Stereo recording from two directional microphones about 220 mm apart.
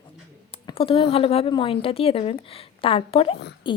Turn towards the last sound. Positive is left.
turn(degrees=20)  # may be behind; listen again after turning